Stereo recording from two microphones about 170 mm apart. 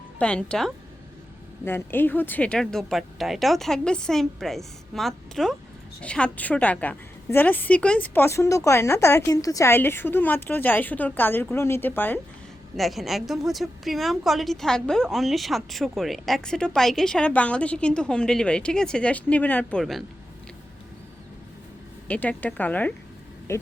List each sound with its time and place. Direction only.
0.2 s a woman's voice: 5° left (ahead or behind)
12.7 s a woman's voice: centre (ahead or behind)
22.0 s a woman's voice: 10° left (ahead or behind)